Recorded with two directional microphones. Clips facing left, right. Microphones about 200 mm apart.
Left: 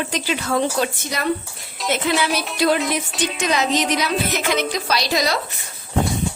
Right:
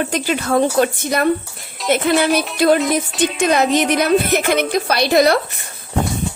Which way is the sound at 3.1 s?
Centre (ahead or behind).